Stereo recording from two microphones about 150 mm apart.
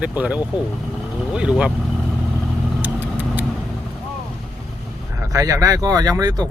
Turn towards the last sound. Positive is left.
turn(degrees=-25)  # may be behind; listen again after turning